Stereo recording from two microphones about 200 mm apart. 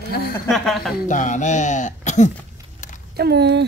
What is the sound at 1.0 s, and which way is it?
Speech, 40° left (ahead or behind).